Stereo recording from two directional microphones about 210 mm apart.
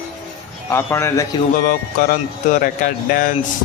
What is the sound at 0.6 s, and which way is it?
Speech, 10° left (ahead or behind).